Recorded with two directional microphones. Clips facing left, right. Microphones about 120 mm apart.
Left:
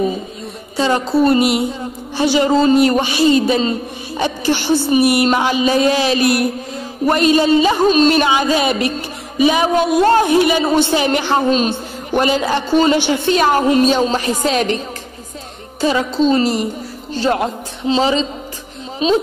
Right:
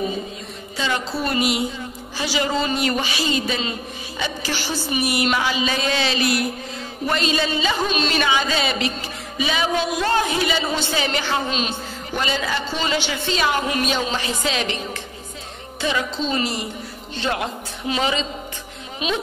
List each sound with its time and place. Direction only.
0.7 s a man's voice: 40° left (ahead or behind)
4.2 s a woman's voice: 55° left (ahead or behind)
8.6 s a woman's voice: 55° left (ahead or behind)
10.2 s a woman's voice: 55° left (ahead or behind)
11.7 s a woman's voice: 60° left (ahead or behind); by 14.8 s 40° left (ahead or behind)
15.8 s a man's voice: 35° left (ahead or behind)